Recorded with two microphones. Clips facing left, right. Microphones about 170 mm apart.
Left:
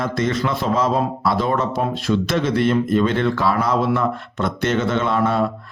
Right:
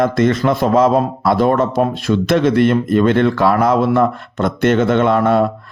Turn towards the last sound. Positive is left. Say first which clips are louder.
# right 6 dB
turn(degrees=-55)  # may be behind; listen again after turning